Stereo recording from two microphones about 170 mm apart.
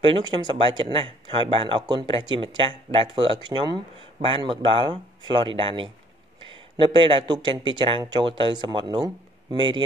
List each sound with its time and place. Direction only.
0.0 s speech: 30° right (ahead or behind)